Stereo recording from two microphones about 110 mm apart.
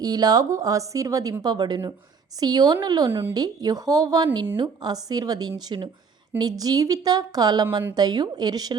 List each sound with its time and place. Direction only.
0.0 s a woman's voice: 35° right (ahead or behind)